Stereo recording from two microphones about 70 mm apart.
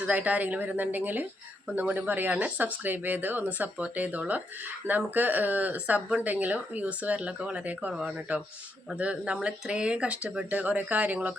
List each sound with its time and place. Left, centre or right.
0.1 s speech: right